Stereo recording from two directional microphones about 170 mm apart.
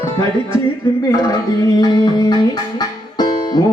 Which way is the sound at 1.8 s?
25° left (ahead or behind).